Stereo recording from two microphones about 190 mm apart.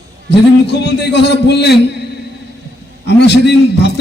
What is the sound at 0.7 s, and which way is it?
A man's voice, 60° left (ahead or behind).